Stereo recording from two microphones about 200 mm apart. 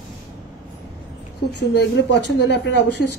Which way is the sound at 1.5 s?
60° left (ahead or behind).